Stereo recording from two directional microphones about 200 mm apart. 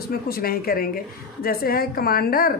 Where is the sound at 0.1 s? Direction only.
50° left (ahead or behind).